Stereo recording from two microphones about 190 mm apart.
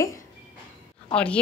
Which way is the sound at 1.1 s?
5° left (ahead or behind).